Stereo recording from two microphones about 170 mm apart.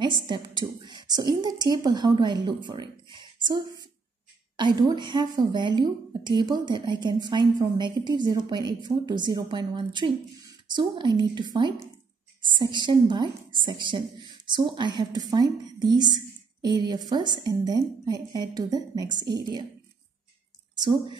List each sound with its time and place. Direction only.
0.0 s a woman's voice: 30° right (ahead or behind)
20.7 s a woman's voice: 25° right (ahead or behind)